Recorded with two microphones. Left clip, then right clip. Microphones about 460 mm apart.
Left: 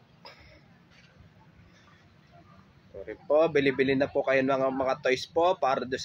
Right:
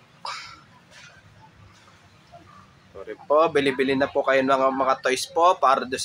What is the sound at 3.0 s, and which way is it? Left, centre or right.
Speech, left.